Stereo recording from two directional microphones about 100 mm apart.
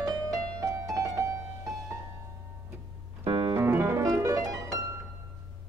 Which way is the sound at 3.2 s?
65° right (ahead or behind).